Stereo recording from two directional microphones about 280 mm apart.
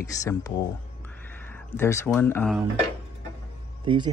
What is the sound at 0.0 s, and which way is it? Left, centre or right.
Speech, centre.